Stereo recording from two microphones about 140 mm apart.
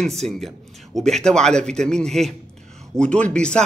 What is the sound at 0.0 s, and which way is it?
A man's voice, centre (ahead or behind).